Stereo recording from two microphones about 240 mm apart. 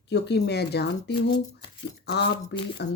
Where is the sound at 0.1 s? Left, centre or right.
Left.